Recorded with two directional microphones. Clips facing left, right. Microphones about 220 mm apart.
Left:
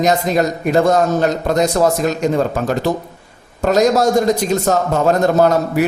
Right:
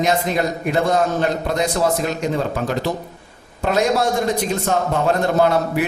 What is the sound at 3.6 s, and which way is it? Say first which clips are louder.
A man's voice: left 5 dB; 40° left (ahead or behind).